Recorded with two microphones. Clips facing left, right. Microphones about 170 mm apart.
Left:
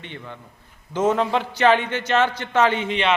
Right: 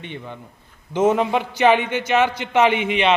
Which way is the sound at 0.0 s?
15° right (ahead or behind).